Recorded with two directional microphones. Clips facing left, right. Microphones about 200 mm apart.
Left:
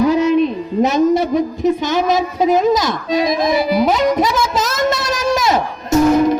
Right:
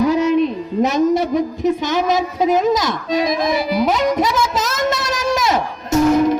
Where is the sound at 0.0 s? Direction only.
25° left (ahead or behind).